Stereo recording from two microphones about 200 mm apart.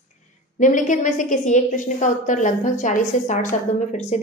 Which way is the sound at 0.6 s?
40° left (ahead or behind).